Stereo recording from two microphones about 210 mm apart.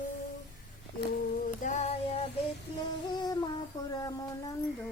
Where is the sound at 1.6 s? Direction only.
35° left (ahead or behind).